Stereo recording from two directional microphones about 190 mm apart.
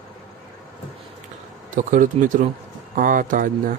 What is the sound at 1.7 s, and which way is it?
Speech, 45° right (ahead or behind).